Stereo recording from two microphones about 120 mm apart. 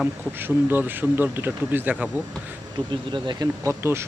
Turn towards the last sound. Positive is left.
turn(degrees=-20)  # may be behind; listen again after turning